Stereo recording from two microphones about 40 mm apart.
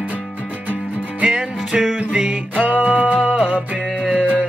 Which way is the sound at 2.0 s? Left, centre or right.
Right.